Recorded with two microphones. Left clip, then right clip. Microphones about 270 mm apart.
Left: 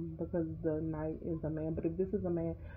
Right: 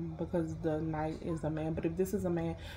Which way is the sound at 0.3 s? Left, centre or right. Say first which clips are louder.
Right 1 dB; right.